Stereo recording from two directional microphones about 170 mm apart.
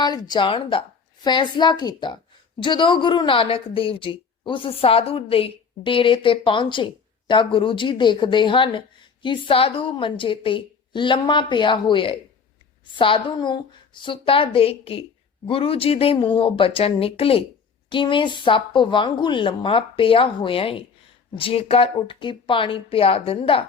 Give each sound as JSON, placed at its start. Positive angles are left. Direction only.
{"t": 0.0, "sound": "speech", "side_deg": 25}